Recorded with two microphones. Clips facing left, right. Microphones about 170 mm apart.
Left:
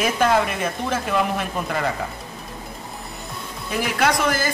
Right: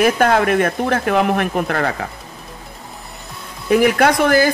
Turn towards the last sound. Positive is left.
turn(degrees=-60)  # may be behind; listen again after turning